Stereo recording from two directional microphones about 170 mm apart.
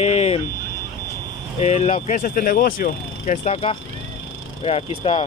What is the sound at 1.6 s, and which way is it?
Speech, 40° left (ahead or behind).